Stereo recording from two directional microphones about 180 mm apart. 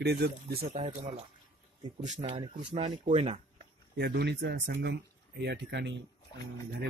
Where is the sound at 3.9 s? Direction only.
65° right (ahead or behind).